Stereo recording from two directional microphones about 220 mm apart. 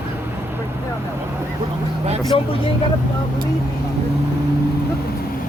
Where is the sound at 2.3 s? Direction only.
25° left (ahead or behind).